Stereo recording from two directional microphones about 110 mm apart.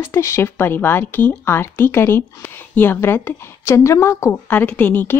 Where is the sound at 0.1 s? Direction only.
25° left (ahead or behind).